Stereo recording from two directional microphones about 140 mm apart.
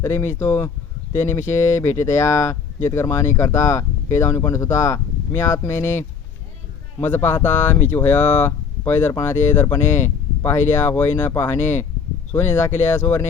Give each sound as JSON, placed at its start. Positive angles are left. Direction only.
{"t": 0.0, "sound": "speech", "side_deg": 20}